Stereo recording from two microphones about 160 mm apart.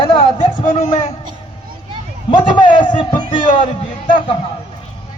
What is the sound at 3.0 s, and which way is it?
Speech, 30° left (ahead or behind).